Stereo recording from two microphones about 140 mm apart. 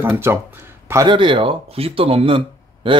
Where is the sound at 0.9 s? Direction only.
30° right (ahead or behind).